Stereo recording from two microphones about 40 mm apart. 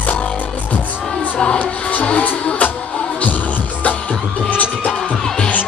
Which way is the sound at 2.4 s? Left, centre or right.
Left.